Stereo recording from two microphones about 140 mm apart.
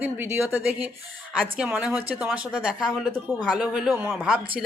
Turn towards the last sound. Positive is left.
turn(degrees=-5)  # may be behind; listen again after turning